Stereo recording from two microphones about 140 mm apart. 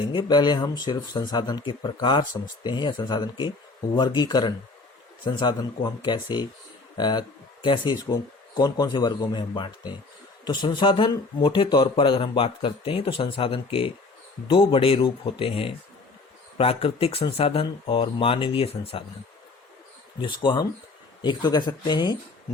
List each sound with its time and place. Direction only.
0.1 s speech: 35° left (ahead or behind)
20.2 s speech: 35° left (ahead or behind)